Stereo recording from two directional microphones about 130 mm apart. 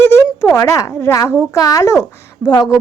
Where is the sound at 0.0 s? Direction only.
20° left (ahead or behind).